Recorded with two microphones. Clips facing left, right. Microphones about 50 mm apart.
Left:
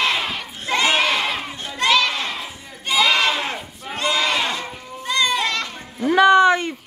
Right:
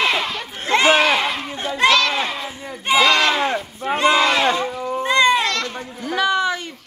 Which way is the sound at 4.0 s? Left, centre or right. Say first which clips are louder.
Right 5 dB; right.